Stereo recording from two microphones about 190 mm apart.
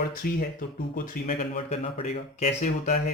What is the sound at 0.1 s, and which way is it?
Speech, 50° left (ahead or behind).